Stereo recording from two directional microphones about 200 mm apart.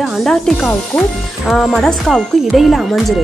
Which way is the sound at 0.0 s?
Centre (ahead or behind).